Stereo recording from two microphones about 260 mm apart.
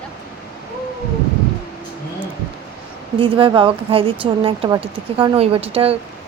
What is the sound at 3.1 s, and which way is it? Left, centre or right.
Speech, centre.